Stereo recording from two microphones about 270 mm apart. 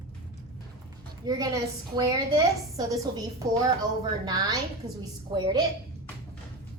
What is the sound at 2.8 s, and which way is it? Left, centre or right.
Dishes, centre.